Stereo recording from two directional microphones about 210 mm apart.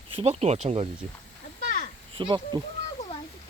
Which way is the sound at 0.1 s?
30° right (ahead or behind).